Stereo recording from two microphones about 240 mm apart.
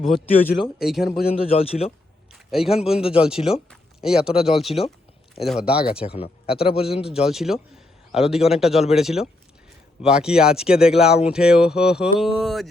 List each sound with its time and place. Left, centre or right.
0.0 s speech: centre
1.3 s speech: left
2.5 s speech: centre
3.0 s speech: left
3.2 s speech: centre
6.1 s speech: left
7.1 s speech: centre